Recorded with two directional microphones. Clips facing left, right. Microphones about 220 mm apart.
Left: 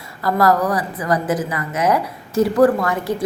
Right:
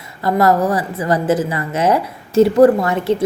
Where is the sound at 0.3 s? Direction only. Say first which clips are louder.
Right 2 dB; 25° right (ahead or behind).